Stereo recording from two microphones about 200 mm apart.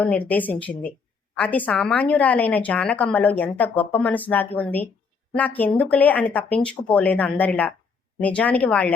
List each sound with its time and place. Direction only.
0.0 s a woman's voice: 10° left (ahead or behind)